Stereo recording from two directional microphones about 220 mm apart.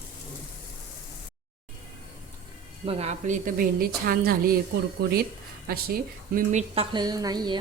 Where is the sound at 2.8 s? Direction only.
30° right (ahead or behind).